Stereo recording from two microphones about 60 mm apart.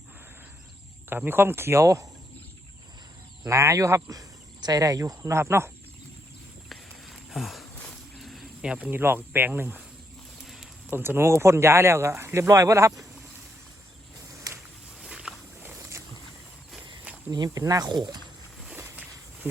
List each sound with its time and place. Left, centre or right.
1.1 s speech: right
3.4 s speech: right
4.1 s speech: right
5.3 s speech: right
6.7 s a sound: centre
8.6 s speech: centre
8.9 s speech: right
10.4 s a sound: centre
10.9 s speech: right
12.5 s speech: right
14.5 s a sound: right
15.0 s walk: centre
15.7 s boat: right
17.4 s speech: right